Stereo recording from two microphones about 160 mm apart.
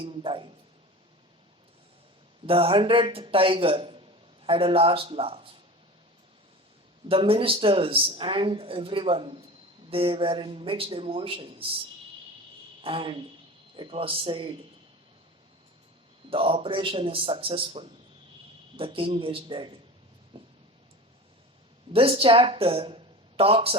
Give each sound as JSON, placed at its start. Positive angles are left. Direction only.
{"t": 0.0, "sound": "speech", "side_deg": -35}
{"t": 2.5, "sound": "speech", "side_deg": -35}
{"t": 7.1, "sound": "speech", "side_deg": -35}
{"t": 12.8, "sound": "speech", "side_deg": -35}
{"t": 16.3, "sound": "speech", "side_deg": -35}
{"t": 20.3, "sound": "a sound", "side_deg": -30}
{"t": 21.9, "sound": "speech", "side_deg": -35}